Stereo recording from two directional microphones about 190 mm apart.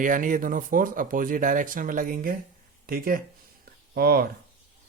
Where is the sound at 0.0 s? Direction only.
45° right (ahead or behind).